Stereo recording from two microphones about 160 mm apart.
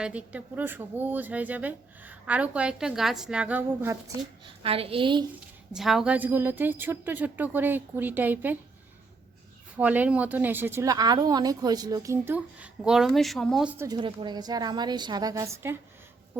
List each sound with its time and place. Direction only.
0.0 s a woman's voice: 10° right (ahead or behind)
4.4 s a woman's voice: 35° right (ahead or behind)
5.7 s a woman's voice: centre (ahead or behind)
9.7 s a woman's voice: 10° right (ahead or behind)
13.7 s a woman's voice: 20° right (ahead or behind)